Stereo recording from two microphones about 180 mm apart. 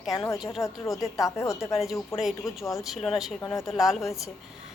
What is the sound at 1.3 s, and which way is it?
Speech, 15° left (ahead or behind).